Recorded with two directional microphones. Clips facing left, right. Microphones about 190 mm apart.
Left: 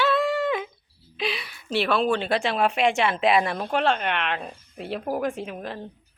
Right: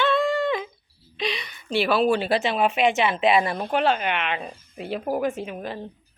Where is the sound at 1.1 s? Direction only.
5° left (ahead or behind).